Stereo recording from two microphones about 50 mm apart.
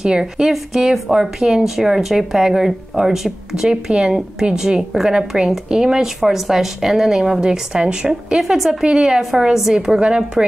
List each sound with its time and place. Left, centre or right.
0.0 s speech: centre
9.8 s a woman's voice: centre